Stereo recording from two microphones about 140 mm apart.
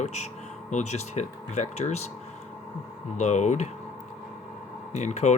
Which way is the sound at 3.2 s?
55° left (ahead or behind).